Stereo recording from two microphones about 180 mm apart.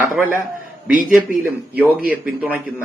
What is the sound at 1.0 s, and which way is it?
Speech, 5° right (ahead or behind).